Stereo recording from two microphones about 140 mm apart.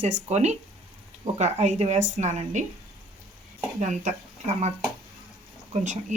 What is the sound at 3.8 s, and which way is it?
Speech, 60° right (ahead or behind).